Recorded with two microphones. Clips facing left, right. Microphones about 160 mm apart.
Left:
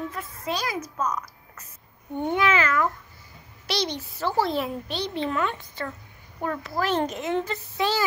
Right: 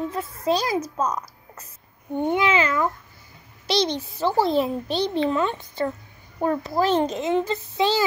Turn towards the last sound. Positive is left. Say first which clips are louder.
# right 4 dB
turn(degrees=-20)  # may be behind; listen again after turning